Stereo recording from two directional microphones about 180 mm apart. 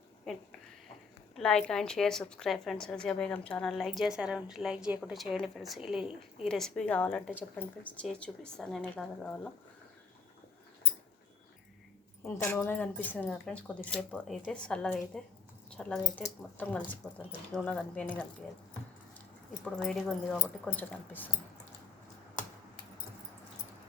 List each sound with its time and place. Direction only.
1.4 s a woman's voice: 5° left (ahead or behind)
12.2 s a woman's voice: 15° left (ahead or behind)
19.6 s a woman's voice: 5° left (ahead or behind)